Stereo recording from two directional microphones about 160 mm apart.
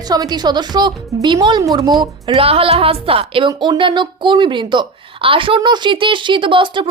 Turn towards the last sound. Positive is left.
turn(degrees=-30)  # may be behind; listen again after turning